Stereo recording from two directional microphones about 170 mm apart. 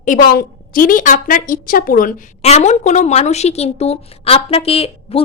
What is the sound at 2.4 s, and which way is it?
A woman's voice, 40° left (ahead or behind).